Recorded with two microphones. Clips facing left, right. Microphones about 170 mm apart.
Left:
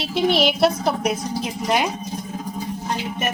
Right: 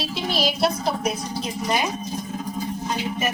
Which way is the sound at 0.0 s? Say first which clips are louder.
Left 6 dB; 65° left (ahead or behind).